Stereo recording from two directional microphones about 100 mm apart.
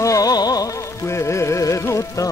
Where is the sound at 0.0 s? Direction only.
35° left (ahead or behind).